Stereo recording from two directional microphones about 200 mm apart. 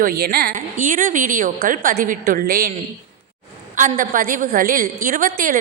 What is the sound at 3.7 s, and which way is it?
Speech, 40° right (ahead or behind).